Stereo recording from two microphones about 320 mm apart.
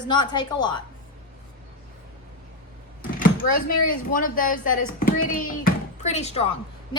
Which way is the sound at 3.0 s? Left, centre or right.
Left.